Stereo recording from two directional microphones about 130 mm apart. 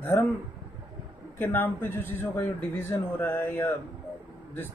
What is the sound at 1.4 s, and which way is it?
Speech, 15° left (ahead or behind).